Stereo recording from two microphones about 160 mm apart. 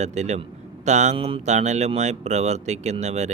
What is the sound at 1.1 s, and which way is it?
Speech, 35° right (ahead or behind).